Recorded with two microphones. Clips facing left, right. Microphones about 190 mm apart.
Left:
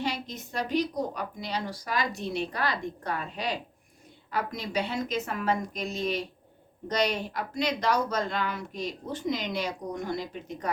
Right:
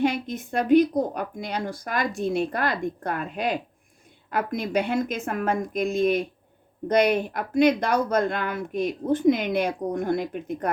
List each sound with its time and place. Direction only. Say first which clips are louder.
0.0 s speech: right 8 dB; 55° right (ahead or behind)